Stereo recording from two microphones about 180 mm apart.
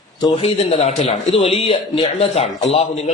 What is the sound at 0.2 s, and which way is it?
A man's voice, 30° left (ahead or behind).